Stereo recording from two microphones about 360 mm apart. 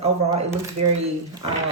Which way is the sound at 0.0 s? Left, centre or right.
Centre.